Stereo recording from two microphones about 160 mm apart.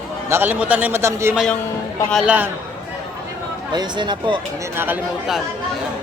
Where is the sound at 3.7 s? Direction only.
25° right (ahead or behind).